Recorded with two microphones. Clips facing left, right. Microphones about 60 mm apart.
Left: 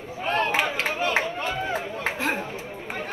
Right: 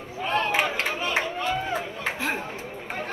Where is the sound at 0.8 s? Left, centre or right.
Left.